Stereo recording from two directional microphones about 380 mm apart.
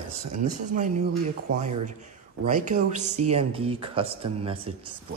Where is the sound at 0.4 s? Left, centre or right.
Centre.